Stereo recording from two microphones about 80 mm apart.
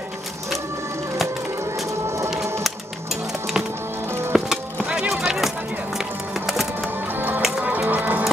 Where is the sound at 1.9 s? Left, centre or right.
Right.